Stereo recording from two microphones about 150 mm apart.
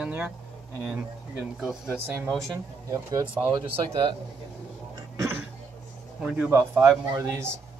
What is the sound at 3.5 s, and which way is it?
Speech, 35° right (ahead or behind).